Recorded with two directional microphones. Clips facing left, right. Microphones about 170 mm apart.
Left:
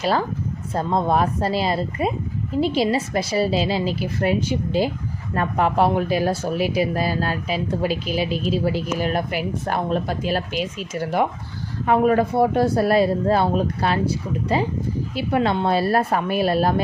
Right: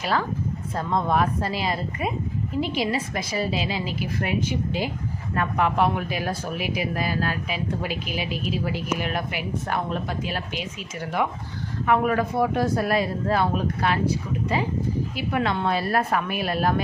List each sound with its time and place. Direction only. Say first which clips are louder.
0.0 s speech: left 4 dB; 30° left (ahead or behind)